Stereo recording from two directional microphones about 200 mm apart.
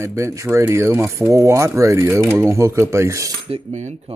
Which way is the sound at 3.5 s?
35° right (ahead or behind).